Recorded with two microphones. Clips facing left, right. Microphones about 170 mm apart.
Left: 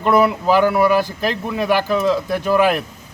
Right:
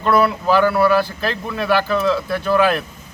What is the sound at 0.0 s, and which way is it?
Speech, 15° left (ahead or behind).